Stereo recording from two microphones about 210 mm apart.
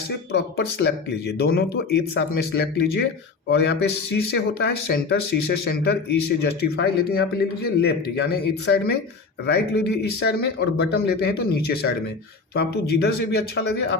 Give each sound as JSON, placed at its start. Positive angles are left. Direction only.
{"t": 0.5, "sound": "speech", "side_deg": 50}